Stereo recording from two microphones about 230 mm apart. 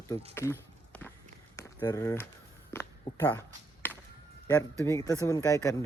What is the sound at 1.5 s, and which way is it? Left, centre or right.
Speech, centre.